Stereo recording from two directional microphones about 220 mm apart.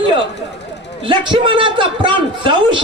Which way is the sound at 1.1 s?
20° right (ahead or behind).